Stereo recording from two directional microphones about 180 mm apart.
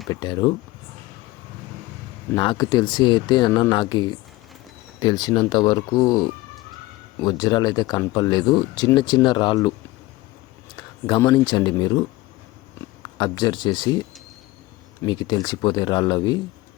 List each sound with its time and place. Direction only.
0.1 s speech: 20° left (ahead or behind)
2.3 s speech: 25° left (ahead or behind)
10.8 s speech: 25° left (ahead or behind)